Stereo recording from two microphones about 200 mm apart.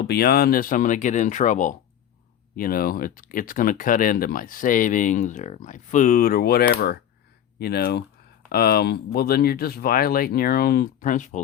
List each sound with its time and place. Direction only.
0.0 s speech: 55° left (ahead or behind)